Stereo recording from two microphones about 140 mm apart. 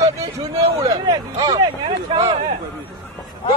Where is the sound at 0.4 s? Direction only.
35° right (ahead or behind).